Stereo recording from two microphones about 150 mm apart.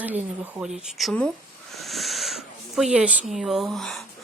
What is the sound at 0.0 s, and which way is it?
Speech, 10° right (ahead or behind).